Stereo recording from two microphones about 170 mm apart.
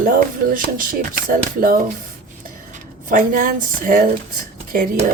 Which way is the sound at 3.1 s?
50° right (ahead or behind).